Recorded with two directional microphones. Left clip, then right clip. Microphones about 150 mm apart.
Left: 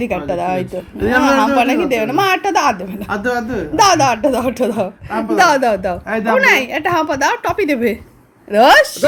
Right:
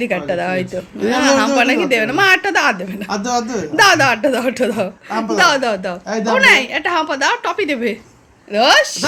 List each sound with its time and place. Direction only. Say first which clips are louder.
0.0 s a woman's voice: even; 5° left (ahead or behind)
3.2 s a woman's voice: even; 30° left (ahead or behind)
3.6 s a woman's voice: even; 5° left (ahead or behind)
5.3 s a woman's voice: left 2 dB; 25° left (ahead or behind)
8.5 s a woman's voice: left 3 dB; 45° left (ahead or behind)